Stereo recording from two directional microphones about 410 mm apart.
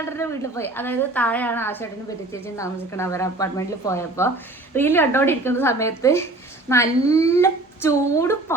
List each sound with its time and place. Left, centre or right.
0.2 s a woman's voice: centre